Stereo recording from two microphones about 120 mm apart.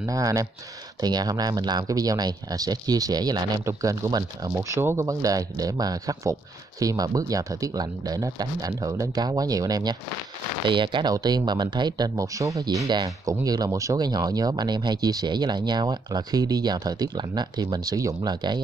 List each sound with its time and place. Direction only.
0.0 s speech: 30° right (ahead or behind)
10.7 s speech: 40° right (ahead or behind)